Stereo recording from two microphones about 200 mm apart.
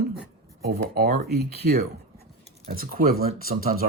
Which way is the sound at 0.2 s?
50° right (ahead or behind).